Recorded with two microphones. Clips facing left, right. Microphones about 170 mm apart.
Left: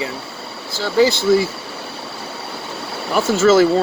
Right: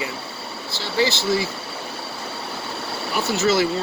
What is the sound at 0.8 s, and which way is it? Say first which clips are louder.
Speech: left 7 dB; 45° left (ahead or behind).